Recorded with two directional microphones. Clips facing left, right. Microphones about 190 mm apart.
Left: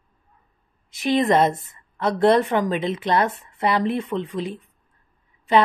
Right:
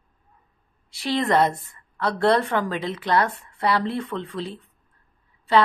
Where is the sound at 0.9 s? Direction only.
20° left (ahead or behind).